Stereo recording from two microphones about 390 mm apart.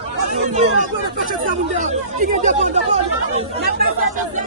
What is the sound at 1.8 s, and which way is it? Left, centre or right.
Speech, centre.